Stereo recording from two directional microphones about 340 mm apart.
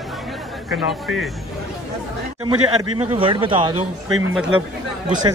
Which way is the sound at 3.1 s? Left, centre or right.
Centre.